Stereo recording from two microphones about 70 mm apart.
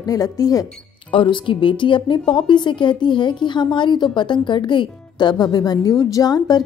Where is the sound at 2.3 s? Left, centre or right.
Left.